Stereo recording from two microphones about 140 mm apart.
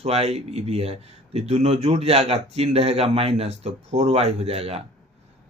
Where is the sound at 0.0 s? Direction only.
50° right (ahead or behind).